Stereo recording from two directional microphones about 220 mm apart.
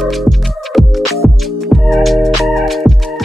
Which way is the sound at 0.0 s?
Centre (ahead or behind).